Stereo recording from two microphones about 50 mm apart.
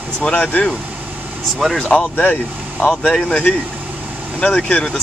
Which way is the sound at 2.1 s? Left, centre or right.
Left.